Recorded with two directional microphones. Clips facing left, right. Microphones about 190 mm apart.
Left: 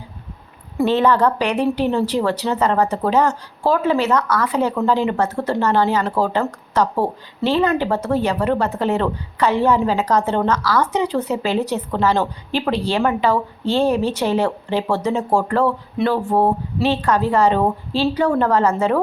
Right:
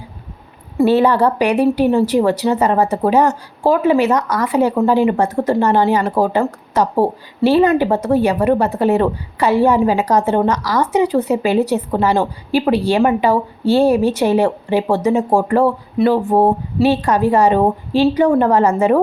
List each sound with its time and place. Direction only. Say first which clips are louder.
0.8 s a woman's voice: right 3 dB; 10° right (ahead or behind)